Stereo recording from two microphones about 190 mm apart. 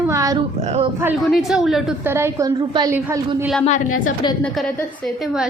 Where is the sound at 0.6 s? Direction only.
35° right (ahead or behind).